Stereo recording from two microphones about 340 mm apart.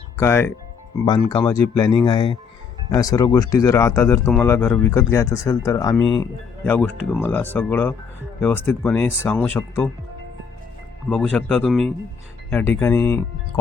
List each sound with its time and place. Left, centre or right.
0.2 s speech: centre
11.1 s speech: centre